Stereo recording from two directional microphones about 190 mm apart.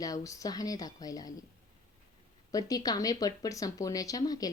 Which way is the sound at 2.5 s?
20° left (ahead or behind).